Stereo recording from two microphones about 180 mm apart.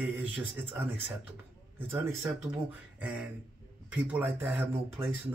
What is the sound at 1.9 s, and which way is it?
Speech, 15° right (ahead or behind).